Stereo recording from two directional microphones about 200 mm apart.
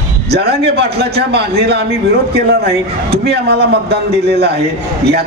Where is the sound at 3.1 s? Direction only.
55° right (ahead or behind).